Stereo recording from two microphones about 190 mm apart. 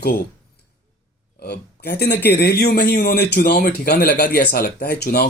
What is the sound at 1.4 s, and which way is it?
Speech, 60° left (ahead or behind).